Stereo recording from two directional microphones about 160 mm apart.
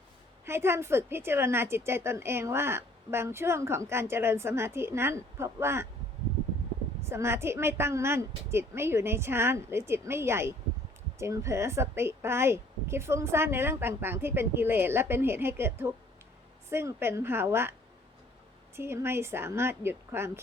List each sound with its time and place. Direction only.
0.4 s a woman's voice: 15° right (ahead or behind)
7.0 s a woman's voice: 15° right (ahead or behind)
18.8 s a woman's voice: 15° right (ahead or behind)